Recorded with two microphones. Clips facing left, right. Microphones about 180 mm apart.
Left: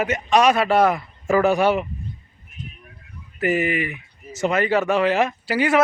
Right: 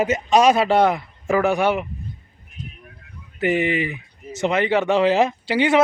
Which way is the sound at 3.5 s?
25° right (ahead or behind).